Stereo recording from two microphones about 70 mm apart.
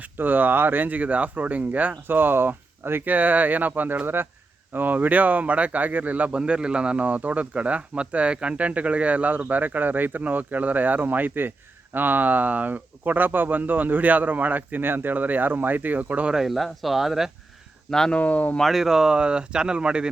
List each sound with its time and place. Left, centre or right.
0.0 s speech: right
16.3 s speech: centre
17.9 s speech: centre
18.2 s speech: left
18.6 s speech: centre